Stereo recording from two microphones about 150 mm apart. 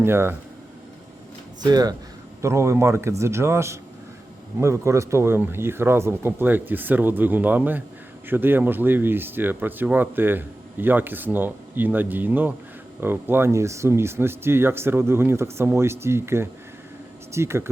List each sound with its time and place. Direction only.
0.0 s speech: 15° right (ahead or behind)
1.6 s speech: 25° right (ahead or behind)